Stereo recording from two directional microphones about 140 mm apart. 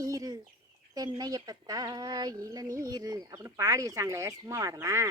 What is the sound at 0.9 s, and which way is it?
Speech, 30° right (ahead or behind).